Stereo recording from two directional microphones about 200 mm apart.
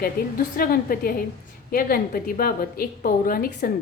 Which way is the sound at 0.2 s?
50° left (ahead or behind).